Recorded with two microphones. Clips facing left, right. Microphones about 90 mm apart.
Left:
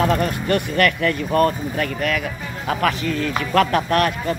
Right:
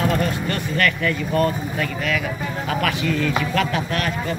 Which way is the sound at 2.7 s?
35° left (ahead or behind).